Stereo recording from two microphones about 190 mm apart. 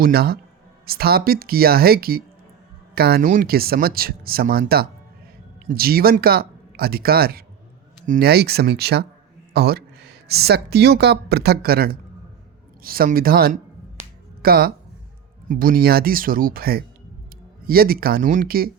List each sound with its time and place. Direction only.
0.0 s speech: 55° right (ahead or behind)